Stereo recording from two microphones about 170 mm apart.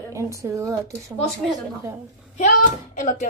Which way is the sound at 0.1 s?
20° right (ahead or behind).